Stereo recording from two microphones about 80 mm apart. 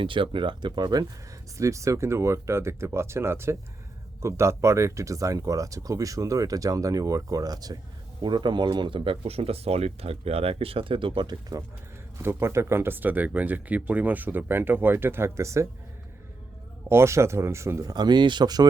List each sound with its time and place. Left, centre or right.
0.0 s speech: right
1.5 s speech: right
8.2 s speech: right
10.8 s speech: right
12.2 s speech: right
16.9 s speech: right
17.9 s speech: right